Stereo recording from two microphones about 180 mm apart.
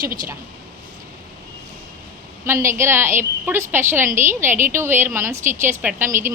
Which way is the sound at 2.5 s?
15° right (ahead or behind).